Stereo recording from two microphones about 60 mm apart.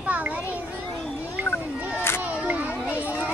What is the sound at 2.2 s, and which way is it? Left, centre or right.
Children playing, right.